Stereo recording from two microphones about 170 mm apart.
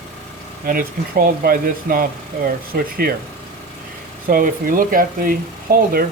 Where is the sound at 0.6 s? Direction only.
55° right (ahead or behind).